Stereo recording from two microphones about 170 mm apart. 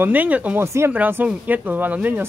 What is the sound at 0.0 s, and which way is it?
Speech, 10° right (ahead or behind).